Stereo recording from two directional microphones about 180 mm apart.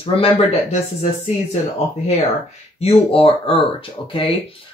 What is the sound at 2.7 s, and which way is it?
Speech, 35° left (ahead or behind).